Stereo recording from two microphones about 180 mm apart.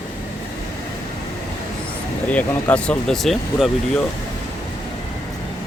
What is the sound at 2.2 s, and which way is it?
Speech, 5° left (ahead or behind).